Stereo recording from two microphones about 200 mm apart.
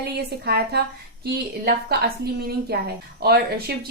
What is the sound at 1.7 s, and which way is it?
A woman's voice, 50° right (ahead or behind).